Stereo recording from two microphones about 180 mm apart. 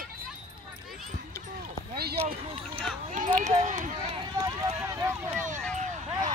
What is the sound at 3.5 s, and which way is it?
Run, 40° right (ahead or behind).